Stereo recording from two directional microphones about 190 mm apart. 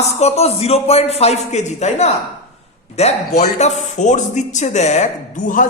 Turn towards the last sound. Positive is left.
turn(degrees=40)  # may be behind; listen again after turning